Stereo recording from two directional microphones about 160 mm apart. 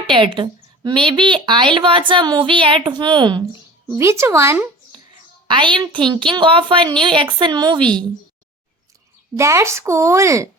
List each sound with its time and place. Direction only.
0.1 s a woman's voice: 30° right (ahead or behind)
3.8 s speech: 15° right (ahead or behind)
5.5 s a woman's voice: 30° right (ahead or behind)
9.3 s a woman's voice: 20° right (ahead or behind)